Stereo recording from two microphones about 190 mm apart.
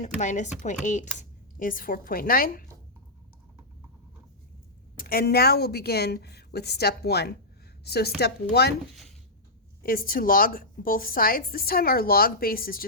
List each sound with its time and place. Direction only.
0.0 s a woman's voice: 40° left (ahead or behind)
4.9 s a woman's voice: 50° left (ahead or behind)
9.8 s a woman's voice: 50° left (ahead or behind)